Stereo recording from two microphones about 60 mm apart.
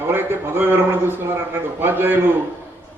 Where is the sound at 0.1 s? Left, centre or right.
Right.